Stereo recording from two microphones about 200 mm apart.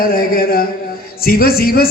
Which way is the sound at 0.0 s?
45° left (ahead or behind).